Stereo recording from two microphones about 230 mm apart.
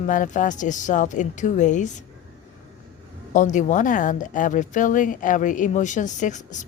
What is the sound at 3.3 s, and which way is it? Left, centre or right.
Speech, left.